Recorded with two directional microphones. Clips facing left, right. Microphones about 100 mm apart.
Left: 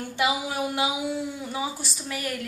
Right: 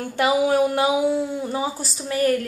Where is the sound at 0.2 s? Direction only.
40° right (ahead or behind).